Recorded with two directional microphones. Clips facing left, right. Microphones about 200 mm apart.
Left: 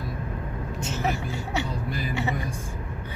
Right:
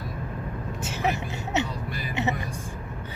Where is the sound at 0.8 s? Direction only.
10° right (ahead or behind).